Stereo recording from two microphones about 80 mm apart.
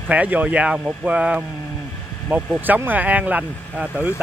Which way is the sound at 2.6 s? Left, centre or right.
Right.